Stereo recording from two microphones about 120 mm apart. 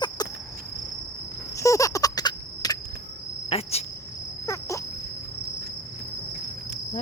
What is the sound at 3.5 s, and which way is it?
Cricket, 55° left (ahead or behind).